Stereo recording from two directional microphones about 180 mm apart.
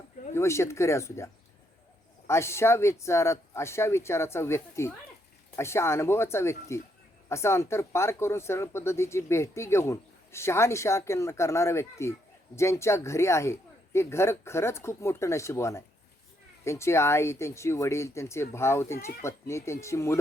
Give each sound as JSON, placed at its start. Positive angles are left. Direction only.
{"t": 0.3, "sound": "speech", "side_deg": 15}